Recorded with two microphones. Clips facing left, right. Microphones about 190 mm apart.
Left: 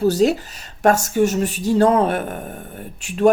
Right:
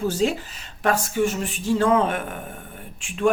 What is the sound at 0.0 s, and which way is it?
Speech, 40° left (ahead or behind).